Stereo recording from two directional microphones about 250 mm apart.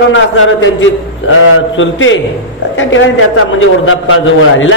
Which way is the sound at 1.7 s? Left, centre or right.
Left.